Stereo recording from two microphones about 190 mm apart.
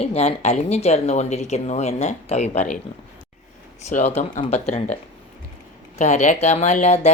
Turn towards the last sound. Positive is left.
turn(degrees=35)  # may be behind; listen again after turning